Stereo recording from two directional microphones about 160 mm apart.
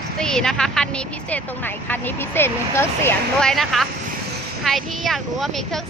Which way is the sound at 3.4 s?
Centre (ahead or behind).